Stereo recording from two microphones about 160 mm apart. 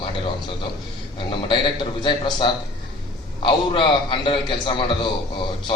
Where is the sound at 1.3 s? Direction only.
30° left (ahead or behind).